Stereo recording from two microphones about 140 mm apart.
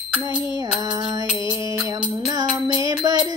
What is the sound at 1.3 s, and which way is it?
Music, 5° right (ahead or behind).